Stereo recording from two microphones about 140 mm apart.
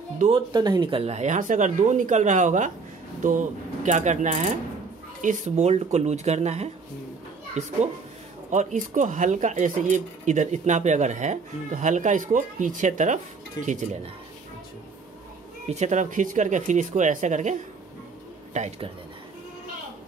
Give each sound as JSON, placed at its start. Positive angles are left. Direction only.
{"t": 0.5, "sound": "speech", "side_deg": -30}
{"t": 8.5, "sound": "speech", "side_deg": -65}
{"t": 13.6, "sound": "speech", "side_deg": 25}
{"t": 15.6, "sound": "speech", "side_deg": -55}